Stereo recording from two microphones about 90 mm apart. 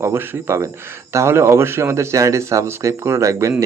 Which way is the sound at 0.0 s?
25° right (ahead or behind).